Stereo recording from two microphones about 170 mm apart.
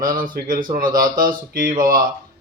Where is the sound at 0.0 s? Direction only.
55° right (ahead or behind).